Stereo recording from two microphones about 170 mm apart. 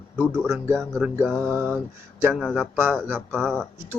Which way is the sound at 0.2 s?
15° right (ahead or behind).